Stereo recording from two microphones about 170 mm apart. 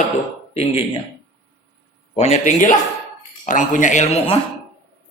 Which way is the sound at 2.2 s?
40° left (ahead or behind).